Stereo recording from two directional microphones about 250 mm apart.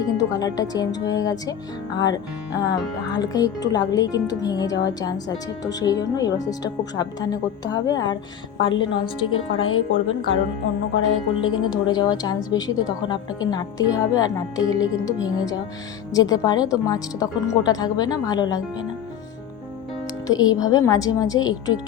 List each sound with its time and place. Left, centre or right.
0.0 s a woman's voice: centre
9.6 s speech: left
11.3 s a woman's voice: centre
20.2 s speech: centre